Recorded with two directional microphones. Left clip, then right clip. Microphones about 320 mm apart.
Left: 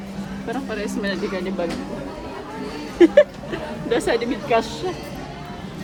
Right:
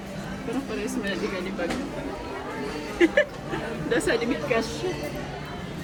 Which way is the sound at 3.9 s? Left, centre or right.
Left.